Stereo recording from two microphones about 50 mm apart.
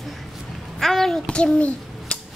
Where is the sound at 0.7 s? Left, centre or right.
Centre.